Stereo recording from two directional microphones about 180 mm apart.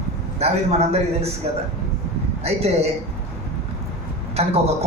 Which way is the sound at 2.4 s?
35° right (ahead or behind).